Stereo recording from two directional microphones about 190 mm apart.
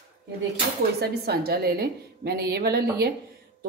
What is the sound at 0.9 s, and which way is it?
Speech, 55° right (ahead or behind).